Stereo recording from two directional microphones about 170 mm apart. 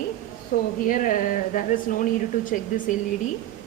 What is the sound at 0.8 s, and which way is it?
A woman's voice, 50° left (ahead or behind).